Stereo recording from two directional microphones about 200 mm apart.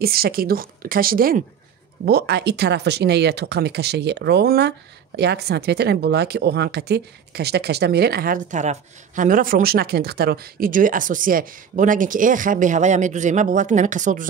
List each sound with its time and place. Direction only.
0.0 s speech: 50° right (ahead or behind)